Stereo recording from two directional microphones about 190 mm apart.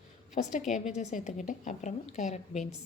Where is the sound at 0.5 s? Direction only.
40° left (ahead or behind).